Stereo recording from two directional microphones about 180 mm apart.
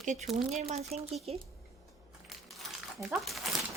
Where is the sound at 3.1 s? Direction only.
Centre (ahead or behind).